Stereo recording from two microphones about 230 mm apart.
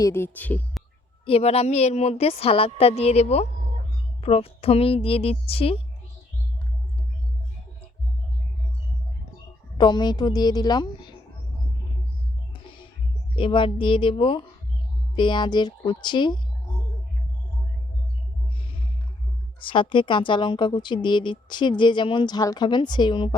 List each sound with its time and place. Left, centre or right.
0.0 s speech: centre
1.2 s speech: left
9.7 s speech: centre
13.3 s speech: left
19.5 s speech: left